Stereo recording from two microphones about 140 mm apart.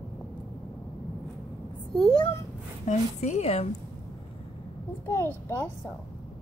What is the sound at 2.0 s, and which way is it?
Speech, 5° left (ahead or behind).